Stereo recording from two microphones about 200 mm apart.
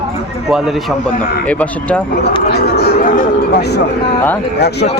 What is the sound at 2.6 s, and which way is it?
Speech, 50° left (ahead or behind).